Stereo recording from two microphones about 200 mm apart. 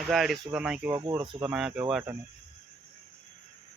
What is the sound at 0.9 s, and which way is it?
Speech, 20° right (ahead or behind).